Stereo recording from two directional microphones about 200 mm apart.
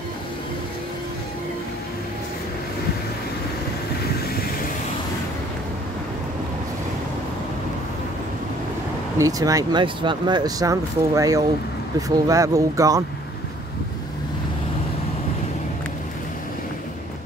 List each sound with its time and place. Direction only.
9.2 s speech: 15° right (ahead or behind)